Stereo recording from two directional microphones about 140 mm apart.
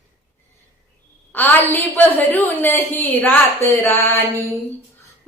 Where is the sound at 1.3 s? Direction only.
15° left (ahead or behind).